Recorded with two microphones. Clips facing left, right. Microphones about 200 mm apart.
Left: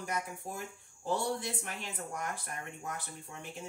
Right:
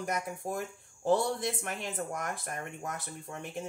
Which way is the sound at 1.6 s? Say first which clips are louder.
Right 5 dB; 50° right (ahead or behind).